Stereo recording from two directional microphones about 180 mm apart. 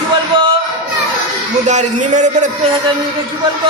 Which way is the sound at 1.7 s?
40° right (ahead or behind).